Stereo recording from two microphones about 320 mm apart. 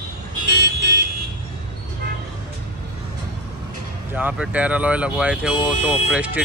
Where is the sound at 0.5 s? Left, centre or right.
Right.